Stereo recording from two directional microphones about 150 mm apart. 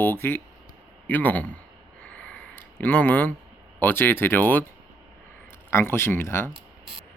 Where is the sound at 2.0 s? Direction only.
10° left (ahead or behind).